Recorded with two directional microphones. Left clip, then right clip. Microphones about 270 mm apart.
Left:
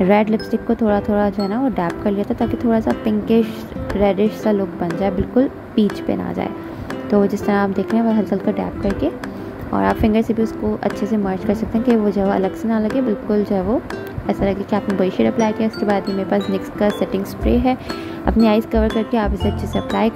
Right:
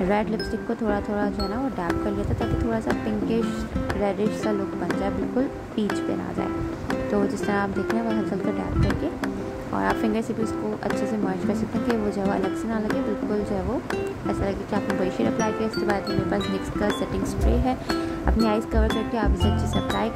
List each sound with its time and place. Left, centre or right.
0.1 s speech: centre
7.1 s speech: centre
9.8 s speech: centre
15.9 s speech: centre